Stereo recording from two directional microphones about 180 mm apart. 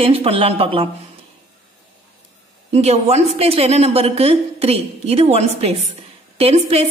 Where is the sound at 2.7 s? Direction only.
35° right (ahead or behind).